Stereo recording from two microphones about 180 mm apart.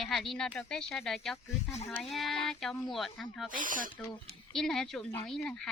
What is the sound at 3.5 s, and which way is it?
Speech, 50° right (ahead or behind).